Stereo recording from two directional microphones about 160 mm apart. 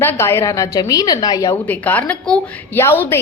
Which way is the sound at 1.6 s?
10° left (ahead or behind).